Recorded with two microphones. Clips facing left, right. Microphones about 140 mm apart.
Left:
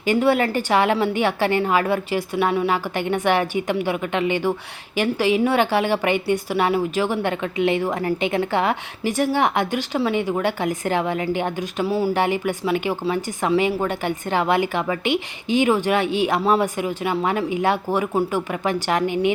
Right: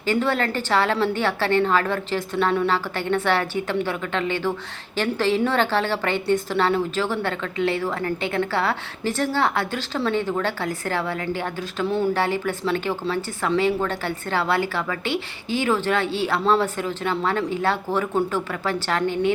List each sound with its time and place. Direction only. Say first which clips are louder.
0.0 s a woman's voice: left 4 dB; 15° left (ahead or behind)
11.9 s speech: even; 5° left (ahead or behind)
12.1 s a woman's voice: left 2 dB; 15° left (ahead or behind)